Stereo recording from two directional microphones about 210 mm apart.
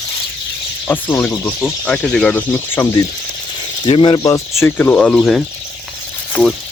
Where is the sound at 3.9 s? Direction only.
25° left (ahead or behind); by 5.4 s centre (ahead or behind).